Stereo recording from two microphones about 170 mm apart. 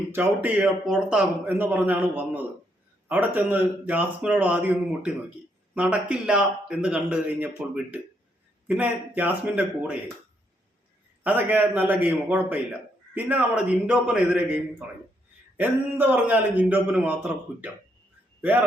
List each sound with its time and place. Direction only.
0.1 s speech: 10° right (ahead or behind)
11.2 s speech: 10° right (ahead or behind)